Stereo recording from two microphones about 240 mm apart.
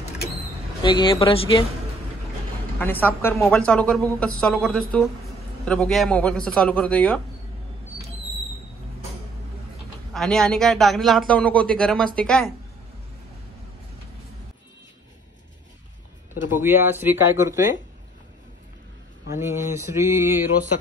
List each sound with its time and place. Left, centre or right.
0.8 s speech: centre
2.8 s a woman's voice: centre
10.1 s a woman's voice: centre
16.4 s speech: centre
19.3 s speech: centre